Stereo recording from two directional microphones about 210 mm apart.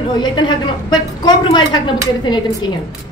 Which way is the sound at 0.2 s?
20° left (ahead or behind).